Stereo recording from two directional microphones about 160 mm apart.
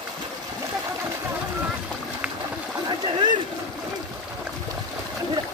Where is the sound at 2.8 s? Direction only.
30° right (ahead or behind).